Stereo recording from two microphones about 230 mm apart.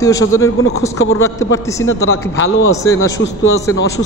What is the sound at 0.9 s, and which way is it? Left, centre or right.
Speech, left.